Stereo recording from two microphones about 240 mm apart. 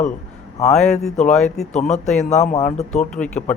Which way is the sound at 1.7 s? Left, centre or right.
Left.